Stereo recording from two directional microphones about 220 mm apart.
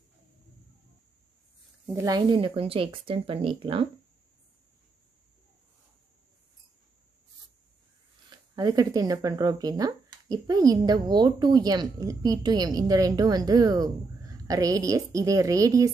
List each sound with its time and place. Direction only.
1.9 s speech: 15° right (ahead or behind)
8.3 s speech: 15° right (ahead or behind)